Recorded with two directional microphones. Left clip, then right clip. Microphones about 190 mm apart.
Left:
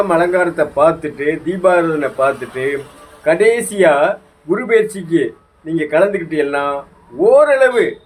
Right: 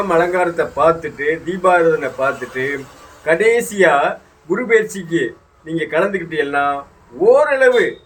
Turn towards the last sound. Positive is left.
turn(degrees=25)  # may be behind; listen again after turning